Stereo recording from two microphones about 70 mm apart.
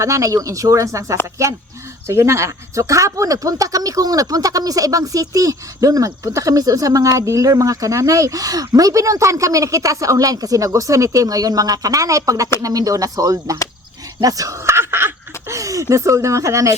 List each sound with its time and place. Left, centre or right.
0.0 s speech: right
14.2 s a sound: right
15.5 s speech: right